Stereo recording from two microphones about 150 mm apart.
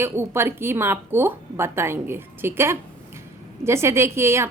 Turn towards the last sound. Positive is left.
turn(degrees=-20)  # may be behind; listen again after turning